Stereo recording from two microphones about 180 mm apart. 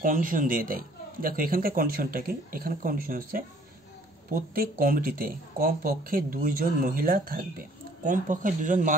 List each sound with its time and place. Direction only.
0.0 s speech: 50° right (ahead or behind)